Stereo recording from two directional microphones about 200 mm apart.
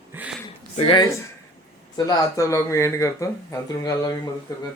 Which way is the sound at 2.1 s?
15° left (ahead or behind).